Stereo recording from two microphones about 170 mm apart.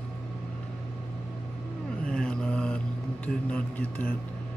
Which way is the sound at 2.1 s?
5° left (ahead or behind).